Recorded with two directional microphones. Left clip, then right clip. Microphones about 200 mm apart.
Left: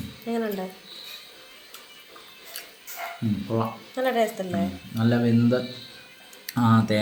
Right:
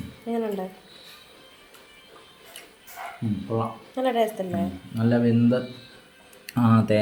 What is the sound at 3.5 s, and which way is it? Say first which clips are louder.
Speech: even; 5° right (ahead or behind).